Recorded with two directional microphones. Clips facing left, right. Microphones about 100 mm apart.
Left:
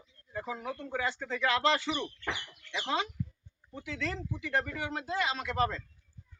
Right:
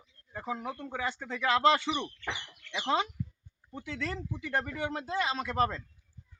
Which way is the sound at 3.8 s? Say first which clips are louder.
Even; 35° right (ahead or behind).